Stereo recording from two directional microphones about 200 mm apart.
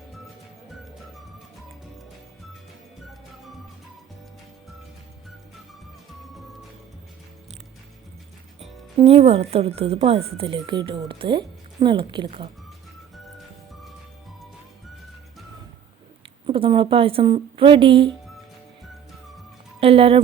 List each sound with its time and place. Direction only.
9.0 s a woman's voice: 30° right (ahead or behind)
16.5 s a woman's voice: 25° right (ahead or behind)
19.8 s speech: 30° right (ahead or behind)